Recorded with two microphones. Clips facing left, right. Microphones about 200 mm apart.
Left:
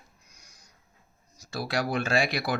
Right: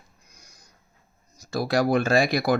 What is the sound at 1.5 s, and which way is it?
Speech, 40° right (ahead or behind).